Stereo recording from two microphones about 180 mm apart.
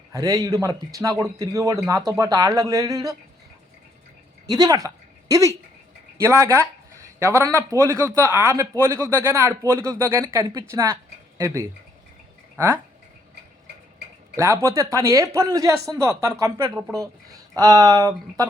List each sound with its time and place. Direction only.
0.1 s a man's voice: 20° right (ahead or behind)
4.4 s a man's voice: 20° right (ahead or behind)
14.3 s speech: 15° right (ahead or behind)
17.5 s a man's voice: 20° right (ahead or behind)